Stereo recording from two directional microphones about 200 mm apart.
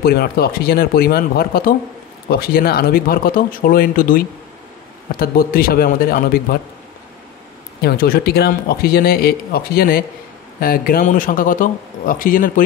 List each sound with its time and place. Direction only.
0.0 s speech: 50° left (ahead or behind)
7.8 s speech: 50° left (ahead or behind)